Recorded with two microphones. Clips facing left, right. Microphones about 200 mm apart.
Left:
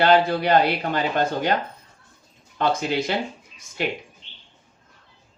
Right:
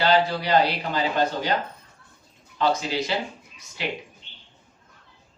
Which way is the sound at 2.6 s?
55° left (ahead or behind).